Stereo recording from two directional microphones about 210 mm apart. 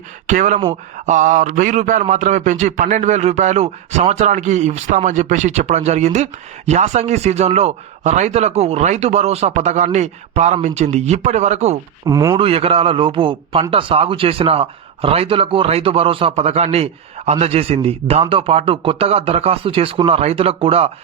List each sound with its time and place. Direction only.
0.3 s a man's voice: 35° right (ahead or behind)
12.0 s a man's voice: 15° right (ahead or behind)